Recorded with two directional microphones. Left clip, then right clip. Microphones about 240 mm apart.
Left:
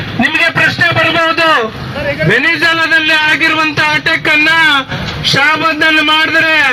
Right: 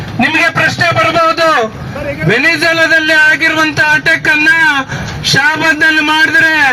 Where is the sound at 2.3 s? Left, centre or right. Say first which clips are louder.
Right 1 dB; right.